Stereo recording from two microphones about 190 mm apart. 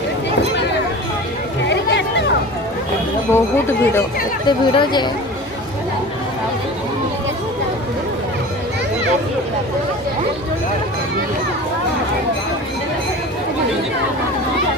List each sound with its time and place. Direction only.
1.6 s a sound: 65° left (ahead or behind)
3.3 s speech: 15° left (ahead or behind)
4.4 s speech: 25° left (ahead or behind)